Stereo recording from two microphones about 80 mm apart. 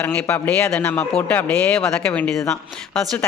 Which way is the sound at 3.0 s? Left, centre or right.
Right.